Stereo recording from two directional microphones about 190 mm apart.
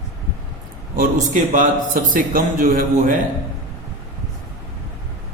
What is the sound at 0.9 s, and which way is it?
A man's voice, 45° right (ahead or behind).